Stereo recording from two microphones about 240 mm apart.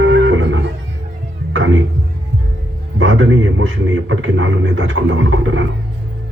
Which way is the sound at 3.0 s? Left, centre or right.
Right.